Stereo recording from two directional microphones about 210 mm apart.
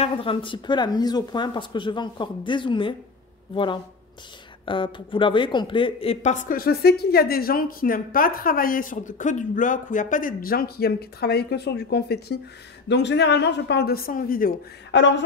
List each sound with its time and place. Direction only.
0.0 s speech: 25° left (ahead or behind); by 14.5 s 40° left (ahead or behind)
14.9 s speech: 60° left (ahead or behind)